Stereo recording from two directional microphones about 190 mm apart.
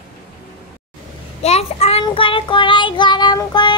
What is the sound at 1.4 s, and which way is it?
Child singing, 35° left (ahead or behind).